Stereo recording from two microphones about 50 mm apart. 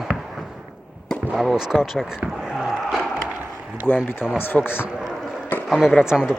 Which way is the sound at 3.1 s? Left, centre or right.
Right.